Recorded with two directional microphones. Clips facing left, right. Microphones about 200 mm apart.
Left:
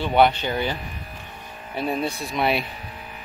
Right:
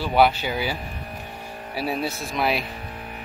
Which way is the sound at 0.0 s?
5° right (ahead or behind).